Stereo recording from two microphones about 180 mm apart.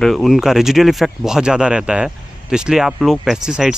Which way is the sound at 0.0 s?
Centre (ahead or behind).